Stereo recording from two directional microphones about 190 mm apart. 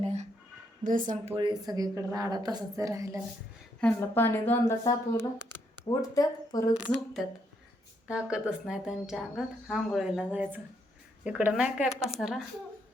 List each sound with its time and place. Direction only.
0.0 s a sound: 35° right (ahead or behind)
0.9 s speech: 45° right (ahead or behind)
1.4 s a woman's voice: 25° right (ahead or behind)
3.8 s a woman's voice: 10° left (ahead or behind)
7.2 s speech: centre (ahead or behind)